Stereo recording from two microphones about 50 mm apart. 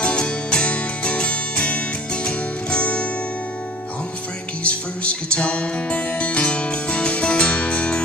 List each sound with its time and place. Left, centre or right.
0.0 s music: centre
4.6 s music: left